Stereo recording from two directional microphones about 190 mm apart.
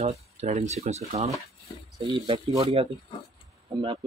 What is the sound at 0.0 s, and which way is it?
Speech, 35° right (ahead or behind).